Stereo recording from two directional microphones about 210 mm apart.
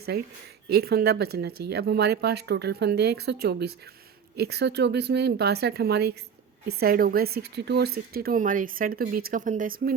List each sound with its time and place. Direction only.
0.7 s a woman's voice: 50° right (ahead or behind)